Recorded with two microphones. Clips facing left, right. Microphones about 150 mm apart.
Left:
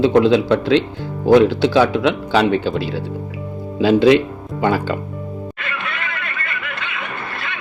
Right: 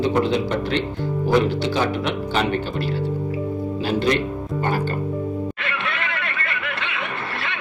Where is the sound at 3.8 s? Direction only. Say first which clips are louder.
Left 10 dB; 90° left.